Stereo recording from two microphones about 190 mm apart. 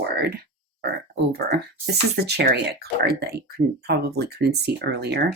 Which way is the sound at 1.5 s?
60° right (ahead or behind).